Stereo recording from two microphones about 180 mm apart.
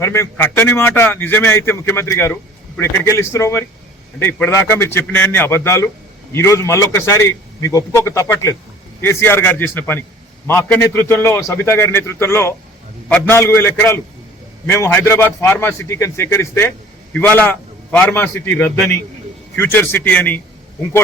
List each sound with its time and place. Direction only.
0.0 s speech: 15° left (ahead or behind)